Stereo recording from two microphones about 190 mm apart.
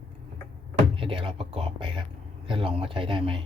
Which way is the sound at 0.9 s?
30° right (ahead or behind).